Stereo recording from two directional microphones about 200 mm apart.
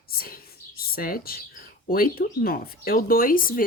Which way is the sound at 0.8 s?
45° left (ahead or behind).